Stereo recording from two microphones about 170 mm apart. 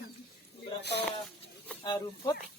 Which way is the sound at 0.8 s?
75° left (ahead or behind).